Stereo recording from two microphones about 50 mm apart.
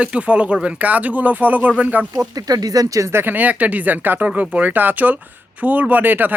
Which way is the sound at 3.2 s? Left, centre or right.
Right.